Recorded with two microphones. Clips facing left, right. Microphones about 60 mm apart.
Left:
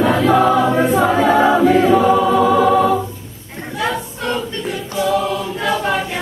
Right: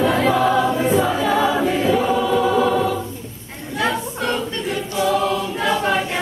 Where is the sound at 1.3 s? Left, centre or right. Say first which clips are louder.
Left 6 dB; left.